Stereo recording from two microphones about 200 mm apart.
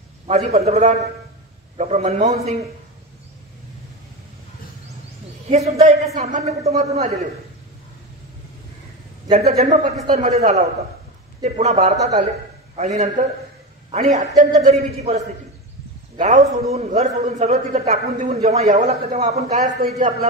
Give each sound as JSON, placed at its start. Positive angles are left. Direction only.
{"t": 0.3, "sound": "a man's voice", "side_deg": -30}
{"t": 5.5, "sound": "a man's voice", "side_deg": -35}
{"t": 9.6, "sound": "a man's voice", "side_deg": -30}